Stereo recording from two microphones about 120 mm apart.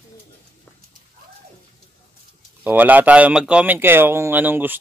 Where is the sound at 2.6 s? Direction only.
15° right (ahead or behind).